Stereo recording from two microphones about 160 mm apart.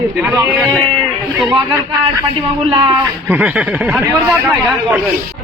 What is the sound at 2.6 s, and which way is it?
Speech, 35° right (ahead or behind).